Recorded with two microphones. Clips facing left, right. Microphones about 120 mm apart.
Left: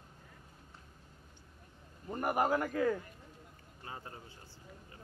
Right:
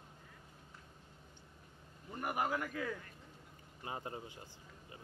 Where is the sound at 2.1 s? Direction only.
45° left (ahead or behind).